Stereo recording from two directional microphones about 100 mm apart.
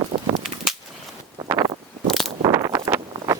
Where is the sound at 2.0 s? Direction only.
5° left (ahead or behind).